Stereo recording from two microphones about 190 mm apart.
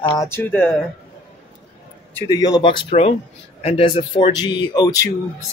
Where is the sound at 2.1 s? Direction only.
20° left (ahead or behind).